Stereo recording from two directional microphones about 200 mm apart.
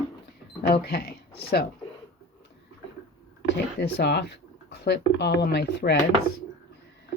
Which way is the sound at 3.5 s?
55° left (ahead or behind).